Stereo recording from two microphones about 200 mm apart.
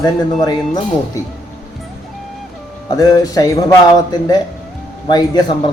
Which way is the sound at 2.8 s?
20° left (ahead or behind).